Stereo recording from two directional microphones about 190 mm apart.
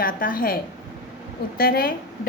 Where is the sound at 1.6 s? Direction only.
50° left (ahead or behind).